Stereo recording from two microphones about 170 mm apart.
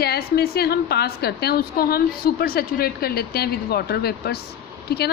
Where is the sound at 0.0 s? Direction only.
65° left (ahead or behind).